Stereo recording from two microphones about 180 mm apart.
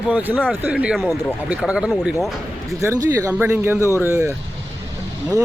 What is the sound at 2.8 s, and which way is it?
Speech, 15° right (ahead or behind).